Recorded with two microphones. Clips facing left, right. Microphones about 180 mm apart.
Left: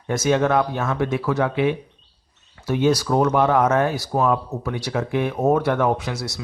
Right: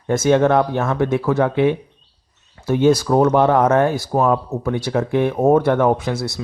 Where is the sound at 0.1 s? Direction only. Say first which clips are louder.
Right 4 dB; 55° right (ahead or behind).